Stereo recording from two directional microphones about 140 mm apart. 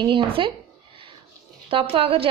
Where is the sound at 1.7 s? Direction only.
40° right (ahead or behind).